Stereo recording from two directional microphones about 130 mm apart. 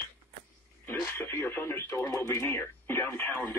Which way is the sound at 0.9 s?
15° left (ahead or behind).